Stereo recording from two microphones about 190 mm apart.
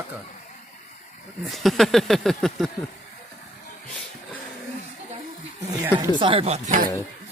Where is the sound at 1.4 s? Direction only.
Centre (ahead or behind).